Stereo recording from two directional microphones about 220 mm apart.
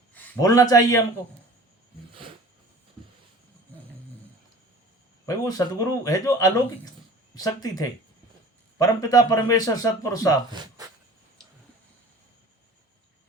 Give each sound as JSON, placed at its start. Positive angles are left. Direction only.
{"t": 0.1, "sound": "a man's voice", "side_deg": 10}
{"t": 5.2, "sound": "a man's voice", "side_deg": 15}
{"t": 10.5, "sound": "speech", "side_deg": -20}